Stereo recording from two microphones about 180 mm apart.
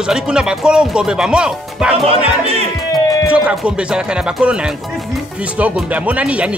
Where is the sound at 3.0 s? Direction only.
20° left (ahead or behind).